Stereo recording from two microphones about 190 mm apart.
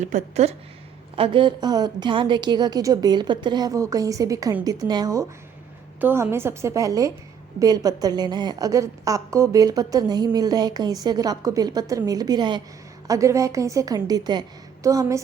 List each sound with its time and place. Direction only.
0.0 s a woman's voice: 40° right (ahead or behind); by 15.2 s 15° right (ahead or behind)